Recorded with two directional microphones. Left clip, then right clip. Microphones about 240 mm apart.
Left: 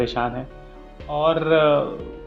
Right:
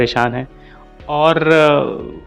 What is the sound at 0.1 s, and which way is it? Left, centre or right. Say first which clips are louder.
A man's voice: right 8 dB; right.